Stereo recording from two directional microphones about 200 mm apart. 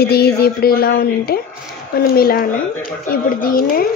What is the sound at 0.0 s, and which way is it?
A woman's voice, 50° left (ahead or behind).